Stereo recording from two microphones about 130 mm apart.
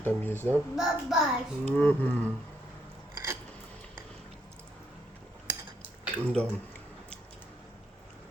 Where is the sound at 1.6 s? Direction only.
10° left (ahead or behind).